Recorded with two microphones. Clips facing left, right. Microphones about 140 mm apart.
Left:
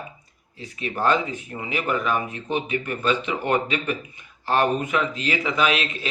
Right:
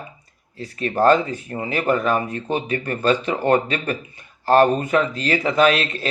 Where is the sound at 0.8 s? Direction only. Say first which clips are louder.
Right 6 dB; 40° right (ahead or behind).